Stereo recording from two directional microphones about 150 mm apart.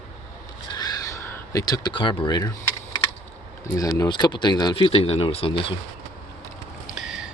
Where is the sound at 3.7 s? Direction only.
20° left (ahead or behind); by 5.7 s 35° left (ahead or behind).